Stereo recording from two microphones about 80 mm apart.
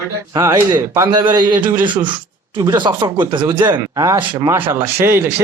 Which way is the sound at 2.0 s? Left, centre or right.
Right.